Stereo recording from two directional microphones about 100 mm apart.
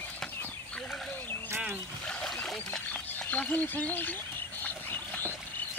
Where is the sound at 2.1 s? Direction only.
10° left (ahead or behind).